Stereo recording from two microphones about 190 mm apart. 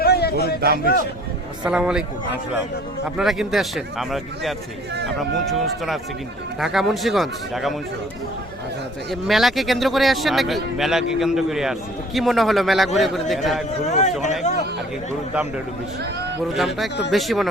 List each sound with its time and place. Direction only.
0.0 s a sound: 55° left (ahead or behind)
1.6 s a man's voice: 5° right (ahead or behind)
3.2 s a man's voice: centre (ahead or behind)
9.0 s a man's voice: centre (ahead or behind)
13.8 s speech: 40° left (ahead or behind)
14.5 s chatter: 40° left (ahead or behind)
15.3 s a man's voice: 5° right (ahead or behind)